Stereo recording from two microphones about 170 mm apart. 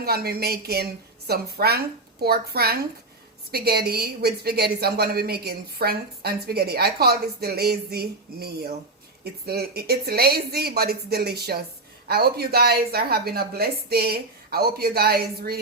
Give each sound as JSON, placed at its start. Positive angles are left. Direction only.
{"t": 0.0, "sound": "a woman's voice", "side_deg": -65}